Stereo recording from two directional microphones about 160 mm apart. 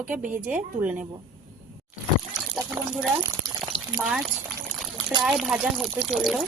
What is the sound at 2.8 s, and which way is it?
Speech, 15° right (ahead or behind).